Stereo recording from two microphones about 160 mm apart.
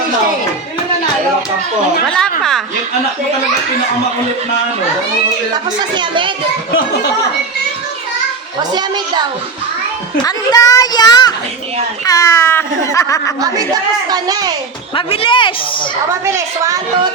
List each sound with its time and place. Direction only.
2.0 s a woman's voice: 5° left (ahead or behind)
5.9 s a child's voice: 30° right (ahead or behind)
8.5 s a child's voice: 25° right (ahead or behind)
10.2 s speech: 25° left (ahead or behind)
14.1 s a child's voice: 25° right (ahead or behind)
14.9 s speech: 35° left (ahead or behind)
16.2 s a woman's voice: 15° right (ahead or behind)